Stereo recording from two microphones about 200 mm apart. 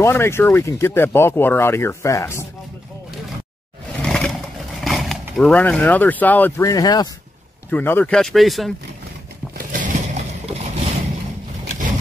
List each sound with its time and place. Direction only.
0.0 s speech: 10° left (ahead or behind)
4.0 s roar: 5° left (ahead or behind)
4.8 s speech: centre (ahead or behind); by 7.1 s 20° left (ahead or behind)
7.7 s speech: 10° left (ahead or behind)
9.7 s a sound: 40° right (ahead or behind)